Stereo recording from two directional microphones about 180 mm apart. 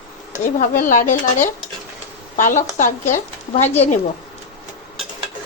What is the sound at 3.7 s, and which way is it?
Speech, 35° left (ahead or behind).